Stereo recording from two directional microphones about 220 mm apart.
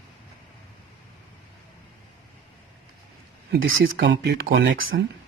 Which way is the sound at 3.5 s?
50° right (ahead or behind).